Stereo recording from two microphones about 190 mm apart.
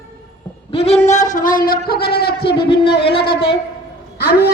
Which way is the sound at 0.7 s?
30° left (ahead or behind).